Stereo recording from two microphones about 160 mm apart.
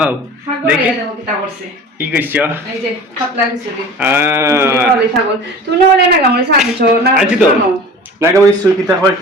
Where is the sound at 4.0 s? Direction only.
15° right (ahead or behind).